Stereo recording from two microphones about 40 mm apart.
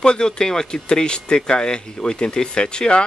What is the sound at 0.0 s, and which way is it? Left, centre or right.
Speech, left.